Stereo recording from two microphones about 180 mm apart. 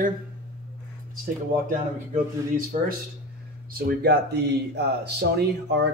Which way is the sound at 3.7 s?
55° right (ahead or behind).